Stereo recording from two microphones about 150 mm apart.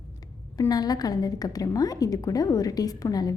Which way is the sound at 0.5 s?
25° left (ahead or behind).